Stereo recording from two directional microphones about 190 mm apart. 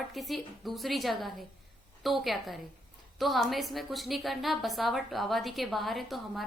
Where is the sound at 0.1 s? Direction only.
Centre (ahead or behind).